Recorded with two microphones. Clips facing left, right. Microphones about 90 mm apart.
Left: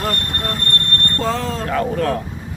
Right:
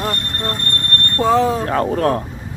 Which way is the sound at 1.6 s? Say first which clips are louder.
Right 2 dB; 40° right (ahead or behind).